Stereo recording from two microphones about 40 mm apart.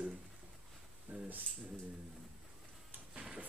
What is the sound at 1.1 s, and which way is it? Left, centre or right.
Speech, right.